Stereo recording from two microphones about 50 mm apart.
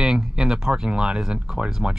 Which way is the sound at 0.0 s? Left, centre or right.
Centre.